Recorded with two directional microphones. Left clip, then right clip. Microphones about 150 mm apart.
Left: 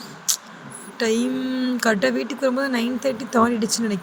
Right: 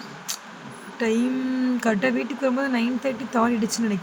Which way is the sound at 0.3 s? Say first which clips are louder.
Left 9 dB; 30° left (ahead or behind).